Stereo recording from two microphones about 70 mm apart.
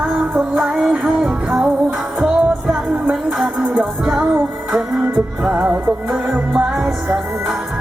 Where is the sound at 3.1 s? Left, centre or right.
Centre.